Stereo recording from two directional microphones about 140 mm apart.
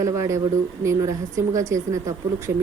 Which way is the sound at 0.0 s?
20° right (ahead or behind).